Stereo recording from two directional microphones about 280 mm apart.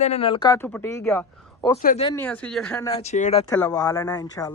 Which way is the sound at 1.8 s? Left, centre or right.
Left.